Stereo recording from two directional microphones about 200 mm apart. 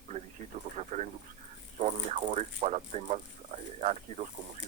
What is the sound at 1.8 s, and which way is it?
Speech, 35° right (ahead or behind).